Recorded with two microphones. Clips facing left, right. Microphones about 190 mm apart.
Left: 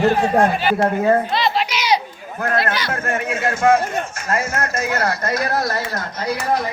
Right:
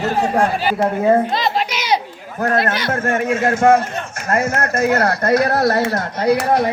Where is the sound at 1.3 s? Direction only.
45° right (ahead or behind).